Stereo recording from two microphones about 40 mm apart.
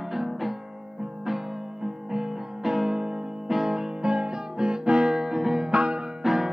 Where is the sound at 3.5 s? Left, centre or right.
Centre.